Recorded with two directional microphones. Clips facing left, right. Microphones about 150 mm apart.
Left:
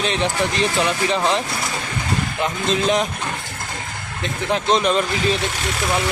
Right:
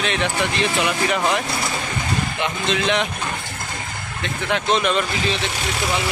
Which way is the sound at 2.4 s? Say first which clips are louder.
Left 3 dB; 40° left (ahead or behind).